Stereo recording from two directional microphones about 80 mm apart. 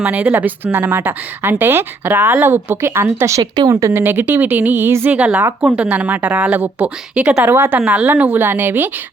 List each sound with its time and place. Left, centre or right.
0.0 s speech: centre; by 3.4 s right
3.4 s speech: right
3.7 s speech: right
3.9 s speech: right
5.1 s a woman's voice: centre
7.4 s speech: right